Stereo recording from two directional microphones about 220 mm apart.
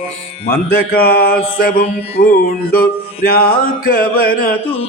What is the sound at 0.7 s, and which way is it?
Mantra, 45° left (ahead or behind).